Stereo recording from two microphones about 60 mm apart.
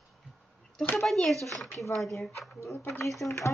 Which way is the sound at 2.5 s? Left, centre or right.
Left.